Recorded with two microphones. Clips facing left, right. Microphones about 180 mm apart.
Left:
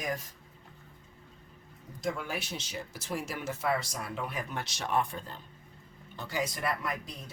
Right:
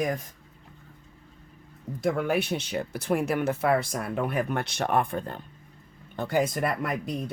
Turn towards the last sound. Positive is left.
turn(degrees=-55)  # may be behind; listen again after turning